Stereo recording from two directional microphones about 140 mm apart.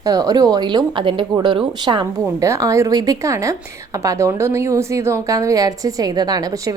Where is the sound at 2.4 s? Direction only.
20° right (ahead or behind).